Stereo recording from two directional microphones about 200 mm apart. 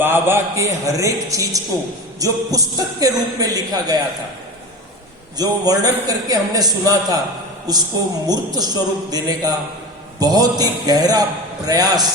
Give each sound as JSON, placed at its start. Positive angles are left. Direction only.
{"t": 0.0, "sound": "a man's voice", "side_deg": -10}
{"t": 5.4, "sound": "a man's voice", "side_deg": -20}